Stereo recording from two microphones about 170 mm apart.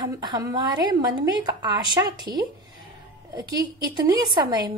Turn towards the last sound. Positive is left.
turn(degrees=-25)  # may be behind; listen again after turning